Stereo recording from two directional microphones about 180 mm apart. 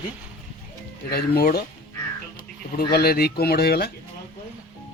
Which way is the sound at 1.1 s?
60° left (ahead or behind).